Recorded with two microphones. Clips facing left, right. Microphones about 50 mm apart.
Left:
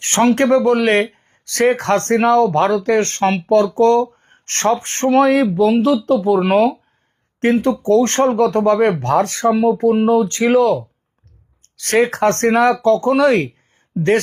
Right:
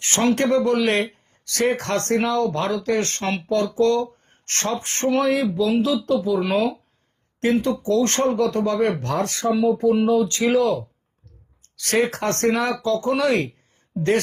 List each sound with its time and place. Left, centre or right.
0.0 s speech: left
11.8 s speech: left